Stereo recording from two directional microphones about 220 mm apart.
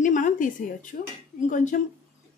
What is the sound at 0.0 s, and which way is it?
A woman's voice, 35° left (ahead or behind).